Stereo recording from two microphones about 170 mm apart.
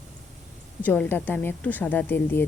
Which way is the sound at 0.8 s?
10° left (ahead or behind).